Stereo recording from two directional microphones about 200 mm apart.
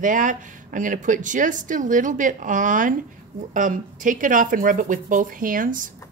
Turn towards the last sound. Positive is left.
turn(degrees=-45)  # may be behind; listen again after turning